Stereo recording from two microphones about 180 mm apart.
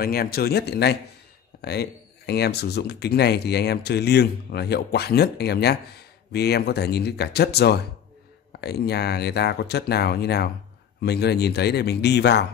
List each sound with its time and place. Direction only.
0.0 s speech: 55° left (ahead or behind)